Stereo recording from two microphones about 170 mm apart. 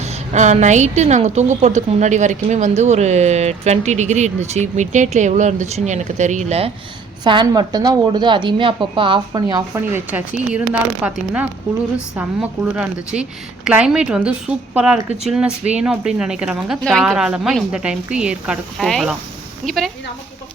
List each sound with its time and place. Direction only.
0.0 s a woman's voice: 40° right (ahead or behind)
7.3 s speech: 25° right (ahead or behind)
9.9 s a woman's voice: 10° right (ahead or behind)